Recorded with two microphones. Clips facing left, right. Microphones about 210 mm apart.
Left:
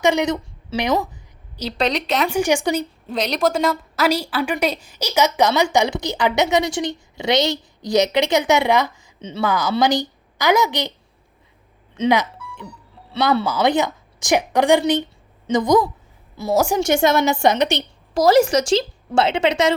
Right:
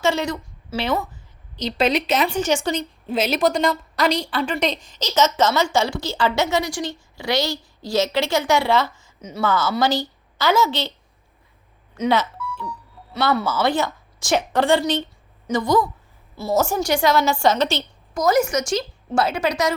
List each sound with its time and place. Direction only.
0.0 s a woman's voice: 15° left (ahead or behind)
1.8 s speech: centre (ahead or behind)
2.3 s a woman's voice: 15° left (ahead or behind)
3.1 s a woman's voice: 5° right (ahead or behind); by 10.9 s 15° left (ahead or behind)
12.0 s music: 15° left (ahead or behind)
13.4 s a woman's voice: 15° left (ahead or behind)
18.1 s a woman's voice: 30° left (ahead or behind)